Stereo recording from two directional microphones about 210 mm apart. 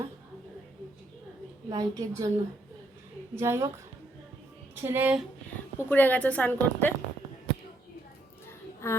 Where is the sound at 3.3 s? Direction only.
10° right (ahead or behind).